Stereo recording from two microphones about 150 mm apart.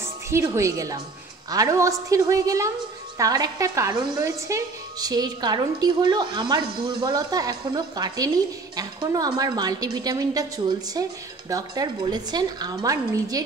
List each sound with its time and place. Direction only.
0.0 s a woman's voice: 20° right (ahead or behind)